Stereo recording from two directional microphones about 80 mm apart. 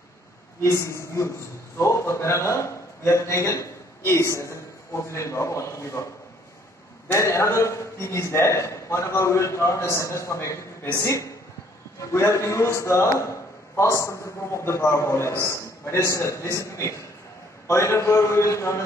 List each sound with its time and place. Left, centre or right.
0.6 s a man's voice: left
7.1 s a man's voice: left